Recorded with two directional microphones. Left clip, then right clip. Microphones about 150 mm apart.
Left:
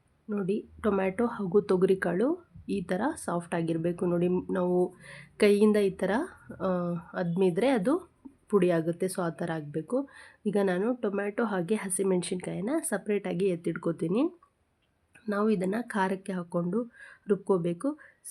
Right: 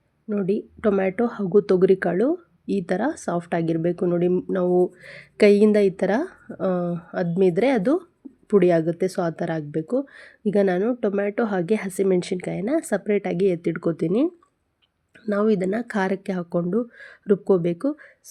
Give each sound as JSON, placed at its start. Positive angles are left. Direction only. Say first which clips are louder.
{"t": 0.3, "sound": "speech", "louder": "right 7 dB", "side_deg": -30}